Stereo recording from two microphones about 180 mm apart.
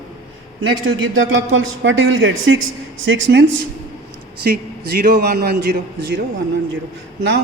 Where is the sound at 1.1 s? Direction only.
90° right.